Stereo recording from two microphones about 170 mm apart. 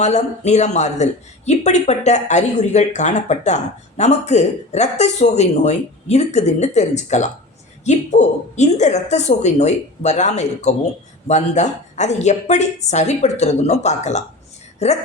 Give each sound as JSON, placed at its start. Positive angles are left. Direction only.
{"t": 0.0, "sound": "speech", "side_deg": 45}